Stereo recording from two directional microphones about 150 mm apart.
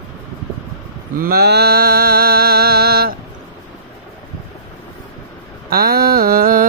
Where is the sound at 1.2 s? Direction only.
90° right.